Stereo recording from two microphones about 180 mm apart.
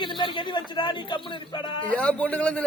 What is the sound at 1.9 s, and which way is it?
Speech, 5° left (ahead or behind).